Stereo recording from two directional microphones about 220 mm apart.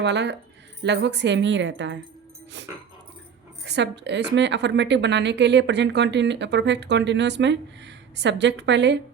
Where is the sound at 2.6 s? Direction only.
55° right (ahead or behind).